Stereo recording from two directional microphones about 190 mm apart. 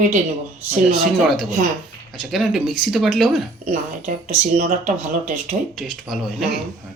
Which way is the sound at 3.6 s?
40° right (ahead or behind).